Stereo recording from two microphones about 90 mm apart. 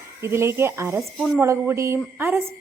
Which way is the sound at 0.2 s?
30° right (ahead or behind).